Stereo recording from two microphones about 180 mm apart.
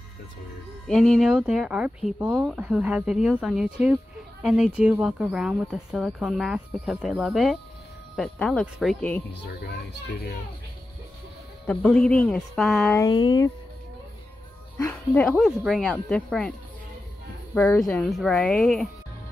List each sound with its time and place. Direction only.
0.8 s speech: centre (ahead or behind)
11.6 s speech: 5° left (ahead or behind)
12.9 s speech: 20° left (ahead or behind)
14.8 s speech: 10° left (ahead or behind)
17.6 s speech: 5° left (ahead or behind)